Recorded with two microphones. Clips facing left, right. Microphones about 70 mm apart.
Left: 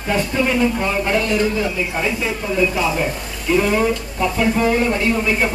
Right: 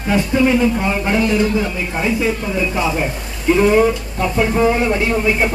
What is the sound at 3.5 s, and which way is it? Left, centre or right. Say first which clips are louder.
Speech: right 4 dB; right.